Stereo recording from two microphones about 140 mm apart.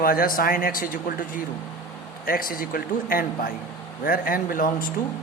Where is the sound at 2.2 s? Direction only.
90° left.